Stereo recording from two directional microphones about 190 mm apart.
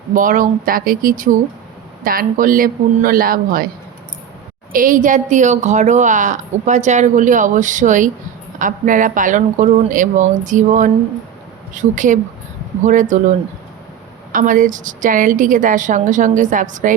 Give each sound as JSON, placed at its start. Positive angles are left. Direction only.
{"t": 0.1, "sound": "a woman's voice", "side_deg": -45}
{"t": 4.7, "sound": "speech", "side_deg": -45}
{"t": 14.3, "sound": "a woman's voice", "side_deg": -45}